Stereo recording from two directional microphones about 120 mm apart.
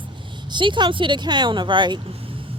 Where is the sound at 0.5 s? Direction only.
40° right (ahead or behind).